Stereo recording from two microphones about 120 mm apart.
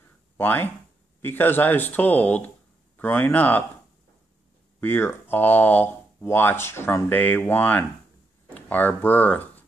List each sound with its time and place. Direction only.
0.4 s speech: 15° left (ahead or behind)
4.7 s speech: 20° left (ahead or behind)